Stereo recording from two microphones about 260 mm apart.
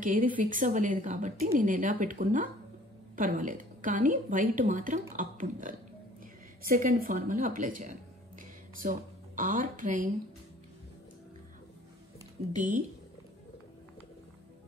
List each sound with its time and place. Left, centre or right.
0.0 s a woman's voice: right